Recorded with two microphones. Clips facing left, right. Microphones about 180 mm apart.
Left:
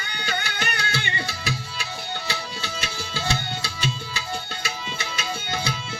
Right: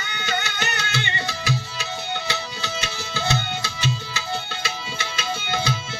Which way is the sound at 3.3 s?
25° right (ahead or behind).